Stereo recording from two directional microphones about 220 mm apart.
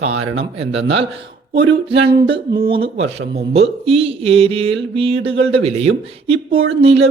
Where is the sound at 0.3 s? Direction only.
25° right (ahead or behind).